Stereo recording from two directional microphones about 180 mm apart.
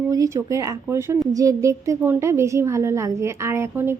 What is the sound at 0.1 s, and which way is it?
A woman's voice, 20° right (ahead or behind).